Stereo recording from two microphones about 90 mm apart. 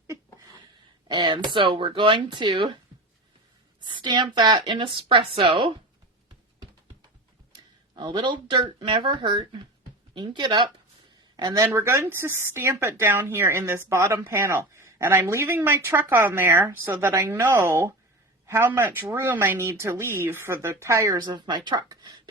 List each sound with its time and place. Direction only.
1.0 s speech: 55° right (ahead or behind)
3.8 s speech: 60° right (ahead or behind); by 5.7 s 75° right (ahead or behind)
7.5 s speech: 55° right (ahead or behind)
11.6 s speech: 30° right (ahead or behind)
21.2 s speech: 55° right (ahead or behind)